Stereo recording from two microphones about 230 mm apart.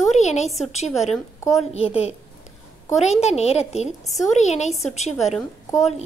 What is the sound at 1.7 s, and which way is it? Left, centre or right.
Speech, left.